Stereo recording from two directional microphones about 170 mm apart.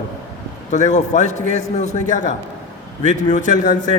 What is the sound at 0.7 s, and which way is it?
A man's voice, 45° left (ahead or behind).